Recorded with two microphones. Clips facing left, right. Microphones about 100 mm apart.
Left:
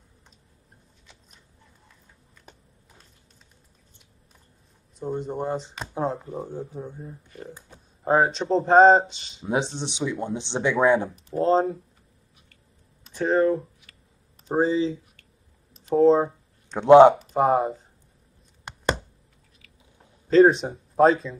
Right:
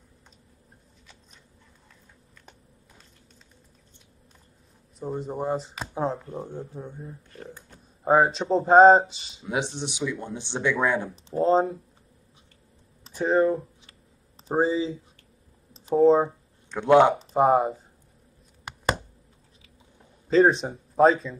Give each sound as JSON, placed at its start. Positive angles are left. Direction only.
{"t": 4.9, "sound": "speech", "side_deg": 0}
{"t": 8.0, "sound": "speech", "side_deg": 0}
{"t": 9.4, "sound": "speech", "side_deg": 30}
{"t": 11.3, "sound": "speech", "side_deg": 0}
{"t": 13.1, "sound": "speech", "side_deg": 0}
{"t": 16.7, "sound": "speech", "side_deg": 25}
{"t": 17.3, "sound": "speech", "side_deg": 0}
{"t": 20.2, "sound": "speech", "side_deg": 0}